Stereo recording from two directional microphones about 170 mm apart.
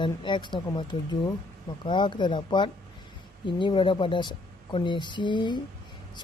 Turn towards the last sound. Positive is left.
turn(degrees=25)  # may be behind; listen again after turning